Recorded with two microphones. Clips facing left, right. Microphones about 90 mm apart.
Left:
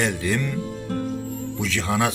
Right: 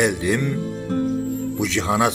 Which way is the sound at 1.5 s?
20° right (ahead or behind).